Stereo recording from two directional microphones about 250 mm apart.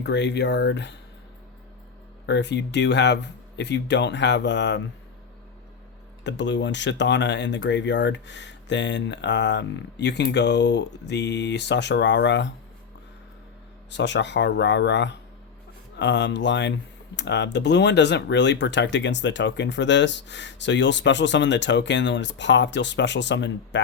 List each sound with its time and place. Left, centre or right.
0.0 s speech: left
2.2 s speech: left
6.2 s speech: left
13.9 s speech: left